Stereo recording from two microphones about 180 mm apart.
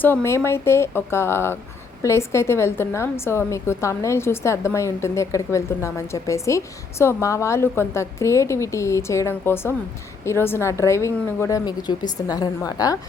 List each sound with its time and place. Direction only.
0.0 s a woman's voice: 15° left (ahead or behind)